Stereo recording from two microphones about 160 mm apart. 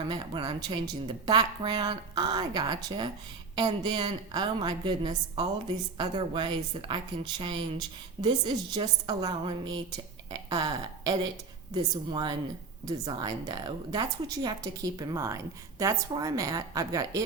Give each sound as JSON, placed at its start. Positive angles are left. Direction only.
{"t": 0.0, "sound": "a woman's voice", "side_deg": -30}